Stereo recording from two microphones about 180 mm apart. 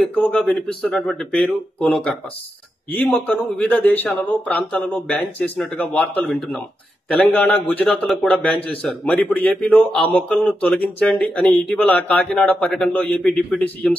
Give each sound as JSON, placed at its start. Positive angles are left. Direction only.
{"t": 0.4, "sound": "speech", "side_deg": 5}